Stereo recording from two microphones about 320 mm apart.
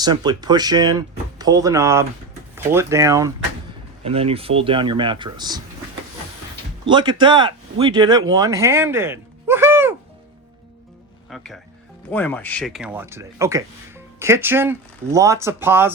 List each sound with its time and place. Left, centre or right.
0.0 s speech: centre
6.8 s speech: centre
11.3 s speech: centre